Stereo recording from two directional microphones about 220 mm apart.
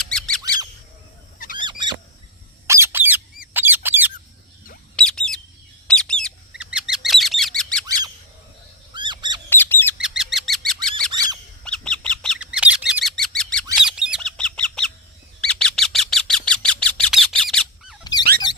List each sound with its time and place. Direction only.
0.1 s squeak: 5° left (ahead or behind)
1.4 s bird: 40° left (ahead or behind)
2.6 s squeak: 10° right (ahead or behind)
4.9 s bird: 5° left (ahead or behind)
8.9 s a sound: 20° right (ahead or behind)
9.5 s bird: 10° left (ahead or behind)
10.0 s bird: centre (ahead or behind)